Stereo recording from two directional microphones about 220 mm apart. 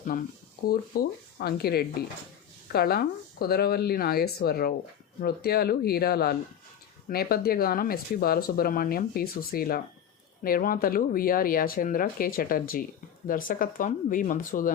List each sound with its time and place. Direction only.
0.1 s speech: 40° left (ahead or behind)